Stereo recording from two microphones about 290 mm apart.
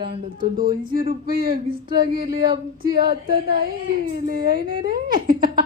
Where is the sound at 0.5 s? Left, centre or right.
Right.